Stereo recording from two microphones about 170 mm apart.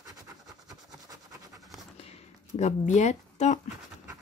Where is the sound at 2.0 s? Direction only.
40° left (ahead or behind).